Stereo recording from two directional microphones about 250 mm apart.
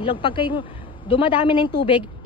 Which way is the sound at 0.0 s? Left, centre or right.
Left.